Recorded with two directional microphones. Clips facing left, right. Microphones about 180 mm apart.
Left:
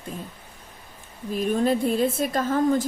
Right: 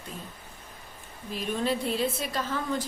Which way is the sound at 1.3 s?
50° left (ahead or behind).